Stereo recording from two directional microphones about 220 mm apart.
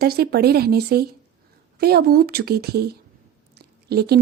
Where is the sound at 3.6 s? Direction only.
45° right (ahead or behind).